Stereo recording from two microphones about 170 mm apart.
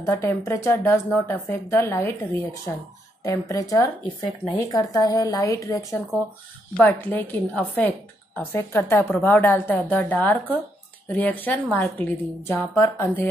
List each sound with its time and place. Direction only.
0.0 s a woman's voice: 15° left (ahead or behind)
3.3 s a woman's voice: 20° left (ahead or behind)